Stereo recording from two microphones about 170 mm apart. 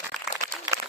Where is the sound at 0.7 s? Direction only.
15° right (ahead or behind).